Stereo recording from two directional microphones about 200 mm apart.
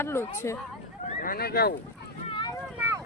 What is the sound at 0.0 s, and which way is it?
Speech, 10° left (ahead or behind).